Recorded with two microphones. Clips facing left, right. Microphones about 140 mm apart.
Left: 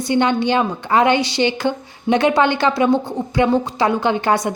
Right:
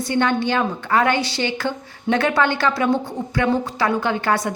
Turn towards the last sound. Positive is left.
turn(degrees=20)  # may be behind; listen again after turning